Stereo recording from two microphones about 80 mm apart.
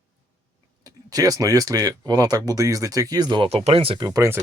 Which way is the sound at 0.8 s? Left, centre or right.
Right.